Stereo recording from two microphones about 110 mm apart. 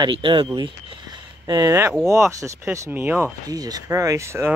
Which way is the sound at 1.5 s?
30° right (ahead or behind).